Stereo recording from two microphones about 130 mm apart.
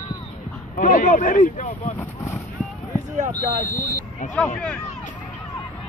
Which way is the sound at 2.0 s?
20° left (ahead or behind).